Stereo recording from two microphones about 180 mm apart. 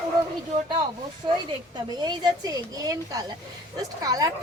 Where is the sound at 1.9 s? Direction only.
25° right (ahead or behind).